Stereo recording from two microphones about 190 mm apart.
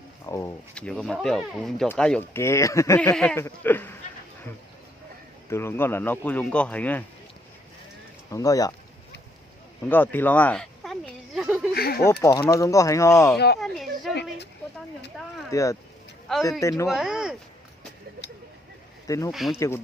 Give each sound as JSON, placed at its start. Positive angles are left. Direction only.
{"t": 0.3, "sound": "speech", "side_deg": 15}
{"t": 0.7, "sound": "speech", "side_deg": 5}
{"t": 5.5, "sound": "speech", "side_deg": 15}
{"t": 8.3, "sound": "speech", "side_deg": 20}
{"t": 9.9, "sound": "a sound", "side_deg": 10}
{"t": 11.7, "sound": "a sound", "side_deg": 55}
{"t": 12.2, "sound": "speech", "side_deg": 15}
{"t": 13.6, "sound": "a sound", "side_deg": 0}
{"t": 15.4, "sound": "speech", "side_deg": 15}
{"t": 16.9, "sound": "speech", "side_deg": -5}
{"t": 19.0, "sound": "speech", "side_deg": 15}
{"t": 19.3, "sound": "speech", "side_deg": 0}
{"t": 19.5, "sound": "speech", "side_deg": 15}